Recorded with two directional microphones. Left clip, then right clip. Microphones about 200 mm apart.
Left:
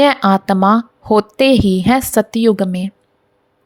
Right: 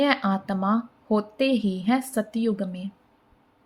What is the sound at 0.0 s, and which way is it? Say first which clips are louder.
Speech: left 12 dB; 55° left (ahead or behind).